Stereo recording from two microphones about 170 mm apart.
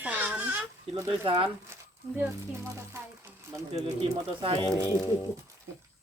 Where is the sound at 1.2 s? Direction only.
30° right (ahead or behind).